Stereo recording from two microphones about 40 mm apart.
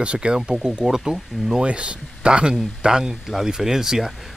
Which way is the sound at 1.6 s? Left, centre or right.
Right.